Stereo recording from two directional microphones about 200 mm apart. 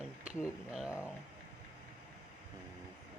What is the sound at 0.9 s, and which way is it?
Speech, 15° left (ahead or behind).